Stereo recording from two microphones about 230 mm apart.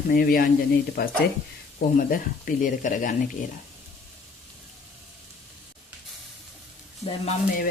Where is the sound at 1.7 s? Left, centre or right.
Left.